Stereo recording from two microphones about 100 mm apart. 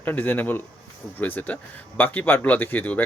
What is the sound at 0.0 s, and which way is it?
Speech, 20° left (ahead or behind).